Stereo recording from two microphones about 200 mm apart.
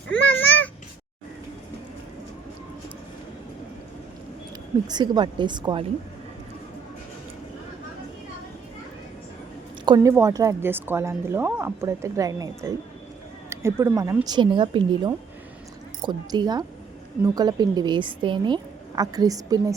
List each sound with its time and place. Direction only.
0.1 s babbling: 75° left (ahead or behind)
4.9 s a woman's voice: 20° right (ahead or behind)
9.8 s a woman's voice: 20° right (ahead or behind)